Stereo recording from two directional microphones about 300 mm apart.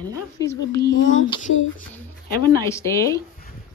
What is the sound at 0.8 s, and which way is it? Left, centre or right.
Speech, left.